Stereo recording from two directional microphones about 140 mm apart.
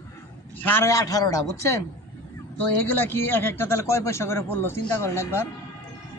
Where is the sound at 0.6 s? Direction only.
15° left (ahead or behind).